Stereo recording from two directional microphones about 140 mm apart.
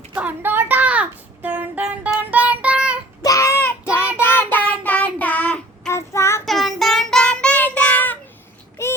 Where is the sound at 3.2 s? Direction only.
20° left (ahead or behind).